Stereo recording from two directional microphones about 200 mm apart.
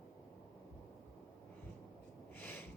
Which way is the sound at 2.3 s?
10° left (ahead or behind).